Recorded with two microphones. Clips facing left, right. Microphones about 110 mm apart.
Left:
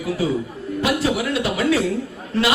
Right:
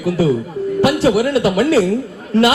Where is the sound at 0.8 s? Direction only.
75° right (ahead or behind).